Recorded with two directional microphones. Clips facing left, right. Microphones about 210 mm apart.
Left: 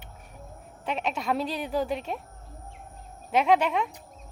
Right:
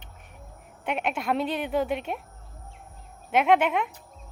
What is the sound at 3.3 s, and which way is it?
Speech, centre (ahead or behind).